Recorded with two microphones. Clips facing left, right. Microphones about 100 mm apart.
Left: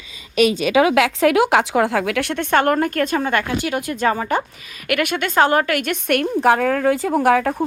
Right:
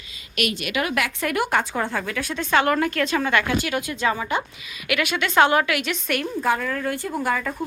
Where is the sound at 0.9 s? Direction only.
90° left; by 6.2 s 55° left (ahead or behind).